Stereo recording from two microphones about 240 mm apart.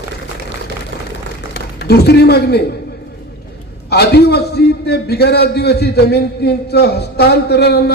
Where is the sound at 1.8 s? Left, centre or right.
Left.